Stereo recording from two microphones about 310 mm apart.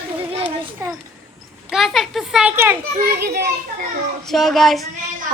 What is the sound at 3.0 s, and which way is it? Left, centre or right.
Speech, right.